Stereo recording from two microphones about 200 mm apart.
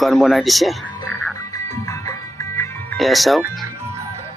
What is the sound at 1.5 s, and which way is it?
Music, 15° left (ahead or behind).